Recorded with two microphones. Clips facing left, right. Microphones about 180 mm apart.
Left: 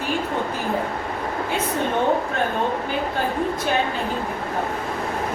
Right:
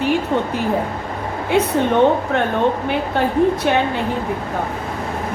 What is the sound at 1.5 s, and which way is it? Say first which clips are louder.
A woman's voice: right 9 dB; 70° right (ahead or behind).